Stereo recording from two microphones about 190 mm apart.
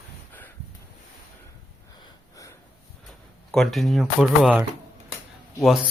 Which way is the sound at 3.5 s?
Centre (ahead or behind).